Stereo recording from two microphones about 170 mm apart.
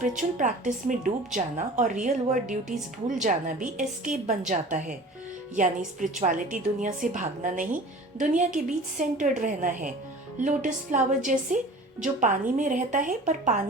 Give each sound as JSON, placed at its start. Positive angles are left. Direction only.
{"t": 0.0, "sound": "a woman's voice", "side_deg": -45}